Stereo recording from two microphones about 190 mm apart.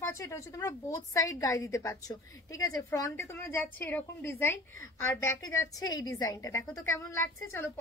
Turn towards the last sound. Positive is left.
turn(degrees=15)  # may be behind; listen again after turning